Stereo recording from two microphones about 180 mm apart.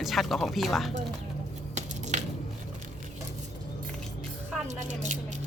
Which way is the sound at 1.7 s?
40° right (ahead or behind).